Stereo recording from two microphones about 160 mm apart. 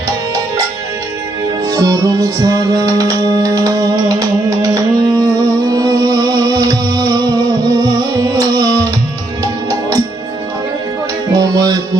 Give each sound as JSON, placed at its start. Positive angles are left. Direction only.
{"t": 1.6, "sound": "music", "side_deg": -20}
{"t": 11.3, "sound": "music", "side_deg": -25}